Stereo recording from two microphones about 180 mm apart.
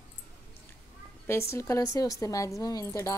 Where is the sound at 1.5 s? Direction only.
15° left (ahead or behind).